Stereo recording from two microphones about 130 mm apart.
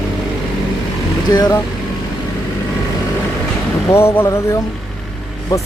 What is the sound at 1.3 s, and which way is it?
Speech, 30° left (ahead or behind).